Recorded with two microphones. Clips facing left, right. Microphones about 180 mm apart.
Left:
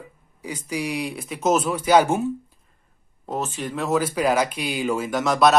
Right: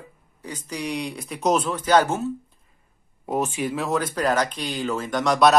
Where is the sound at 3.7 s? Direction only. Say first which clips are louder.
Left 6 dB; centre (ahead or behind).